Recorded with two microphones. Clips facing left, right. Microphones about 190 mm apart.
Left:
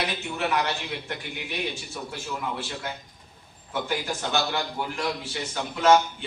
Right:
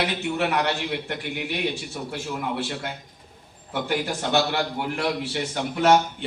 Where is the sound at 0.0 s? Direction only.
65° right (ahead or behind).